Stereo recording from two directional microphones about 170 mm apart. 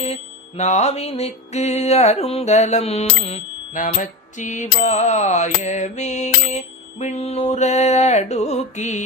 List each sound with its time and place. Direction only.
0.0 s mantra: 40° left (ahead or behind)